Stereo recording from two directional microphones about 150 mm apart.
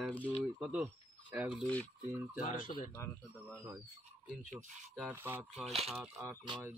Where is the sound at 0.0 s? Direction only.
10° left (ahead or behind).